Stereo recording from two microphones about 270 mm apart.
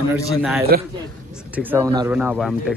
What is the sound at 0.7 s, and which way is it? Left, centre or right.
Speech, right.